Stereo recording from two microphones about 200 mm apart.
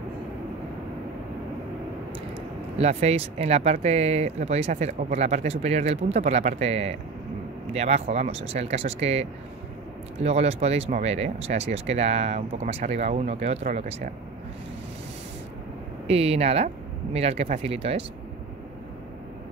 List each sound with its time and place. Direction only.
2.8 s speech: 35° right (ahead or behind)
16.1 s speech: 30° right (ahead or behind)